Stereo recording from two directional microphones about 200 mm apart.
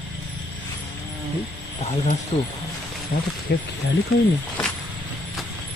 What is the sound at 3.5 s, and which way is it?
Speech, 55° left (ahead or behind).